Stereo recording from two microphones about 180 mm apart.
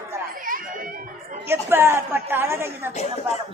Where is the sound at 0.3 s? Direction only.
50° right (ahead or behind).